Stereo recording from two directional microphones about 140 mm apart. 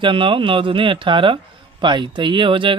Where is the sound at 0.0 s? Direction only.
40° right (ahead or behind).